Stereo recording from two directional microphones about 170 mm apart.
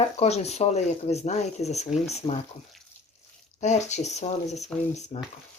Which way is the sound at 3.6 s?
45° left (ahead or behind).